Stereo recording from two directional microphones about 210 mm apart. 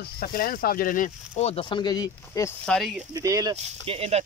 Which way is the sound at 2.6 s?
Centre (ahead or behind).